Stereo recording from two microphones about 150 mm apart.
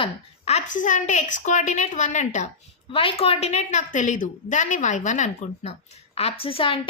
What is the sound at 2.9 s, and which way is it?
A woman's voice, 40° left (ahead or behind).